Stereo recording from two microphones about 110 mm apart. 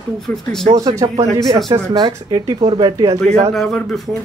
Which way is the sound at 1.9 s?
35° right (ahead or behind).